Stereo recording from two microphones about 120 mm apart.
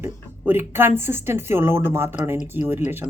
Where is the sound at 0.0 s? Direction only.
15° right (ahead or behind).